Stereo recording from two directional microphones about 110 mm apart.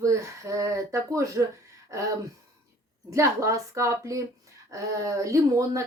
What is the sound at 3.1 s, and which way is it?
A child's voice, 25° right (ahead or behind).